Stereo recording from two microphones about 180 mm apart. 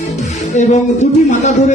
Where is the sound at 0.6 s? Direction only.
40° left (ahead or behind).